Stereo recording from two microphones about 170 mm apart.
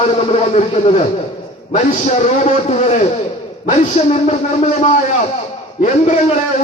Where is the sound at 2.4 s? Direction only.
40° left (ahead or behind).